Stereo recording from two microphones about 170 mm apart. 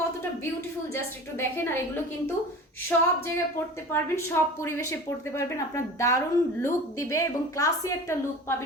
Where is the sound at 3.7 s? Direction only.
15° left (ahead or behind).